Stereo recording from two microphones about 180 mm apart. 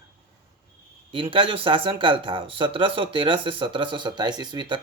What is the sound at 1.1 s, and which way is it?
Speech, 30° right (ahead or behind).